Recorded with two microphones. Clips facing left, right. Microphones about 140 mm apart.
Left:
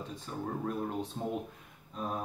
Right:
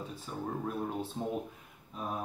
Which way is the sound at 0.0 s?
5° right (ahead or behind).